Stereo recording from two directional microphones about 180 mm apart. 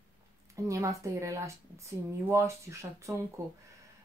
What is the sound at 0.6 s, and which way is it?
Speech, 15° right (ahead or behind).